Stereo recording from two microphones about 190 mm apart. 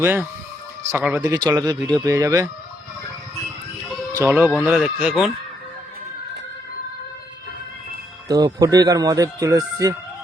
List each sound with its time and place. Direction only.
0.0 s speech: 10° right (ahead or behind)
1.5 s speech: 20° right (ahead or behind)
4.1 s speech: 10° right (ahead or behind)
8.3 s speech: 20° right (ahead or behind)